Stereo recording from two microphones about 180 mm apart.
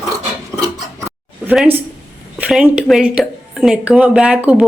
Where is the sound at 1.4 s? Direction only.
10° right (ahead or behind).